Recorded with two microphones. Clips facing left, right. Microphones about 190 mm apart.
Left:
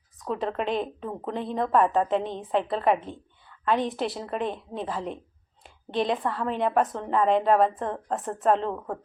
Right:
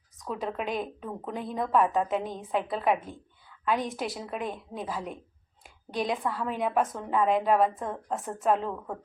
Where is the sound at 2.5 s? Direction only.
5° right (ahead or behind).